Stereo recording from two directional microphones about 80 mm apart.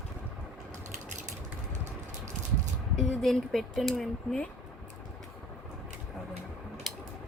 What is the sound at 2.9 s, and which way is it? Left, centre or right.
Speech, centre.